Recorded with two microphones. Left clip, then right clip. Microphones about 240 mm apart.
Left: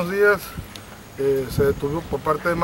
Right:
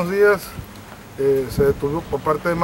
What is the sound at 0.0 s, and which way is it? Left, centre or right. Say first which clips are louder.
Speech: right 2 dB; centre.